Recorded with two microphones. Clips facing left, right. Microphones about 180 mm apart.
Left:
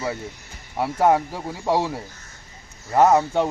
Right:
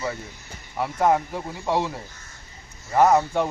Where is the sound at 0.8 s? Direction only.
20° left (ahead or behind).